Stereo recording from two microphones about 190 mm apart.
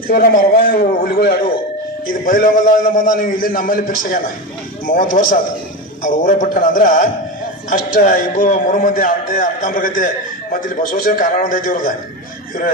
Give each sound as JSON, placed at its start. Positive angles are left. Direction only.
{"t": 0.1, "sound": "a man's voice", "side_deg": 50}